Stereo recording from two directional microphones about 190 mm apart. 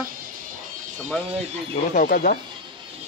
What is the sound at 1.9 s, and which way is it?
Speech, 50° left (ahead or behind).